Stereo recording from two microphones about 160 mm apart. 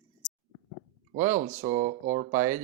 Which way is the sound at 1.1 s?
45° right (ahead or behind).